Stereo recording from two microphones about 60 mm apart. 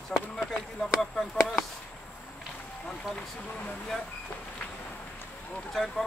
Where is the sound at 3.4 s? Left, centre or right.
Left.